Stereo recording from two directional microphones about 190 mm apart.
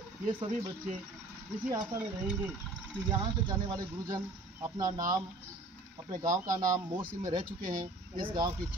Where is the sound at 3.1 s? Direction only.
20° right (ahead or behind).